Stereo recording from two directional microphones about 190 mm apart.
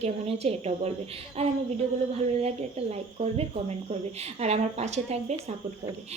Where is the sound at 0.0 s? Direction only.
30° right (ahead or behind).